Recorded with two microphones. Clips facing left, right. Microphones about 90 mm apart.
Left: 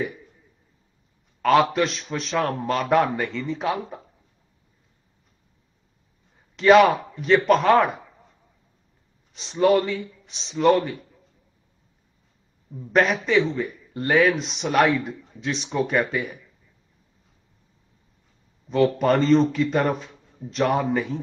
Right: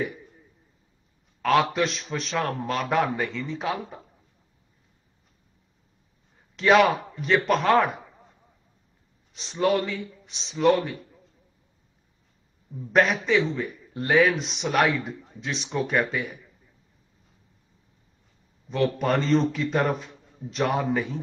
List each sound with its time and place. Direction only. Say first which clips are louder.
1.4 s a man's voice: left 3 dB; centre (ahead or behind)
6.5 s a man's voice: left 4 dB; centre (ahead or behind)
9.3 s a man's voice: left 5 dB; centre (ahead or behind)
12.7 s a man's voice: left 1 dB; centre (ahead or behind)
18.7 s a man's voice: left 5 dB; centre (ahead or behind)